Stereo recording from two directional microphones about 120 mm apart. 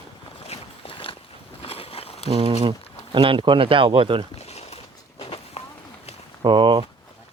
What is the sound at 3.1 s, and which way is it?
Speech, 45° right (ahead or behind).